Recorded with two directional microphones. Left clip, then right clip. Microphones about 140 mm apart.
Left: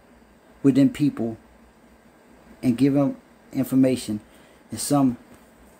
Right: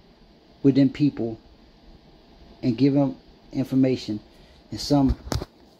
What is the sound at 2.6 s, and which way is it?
Speech, 15° left (ahead or behind).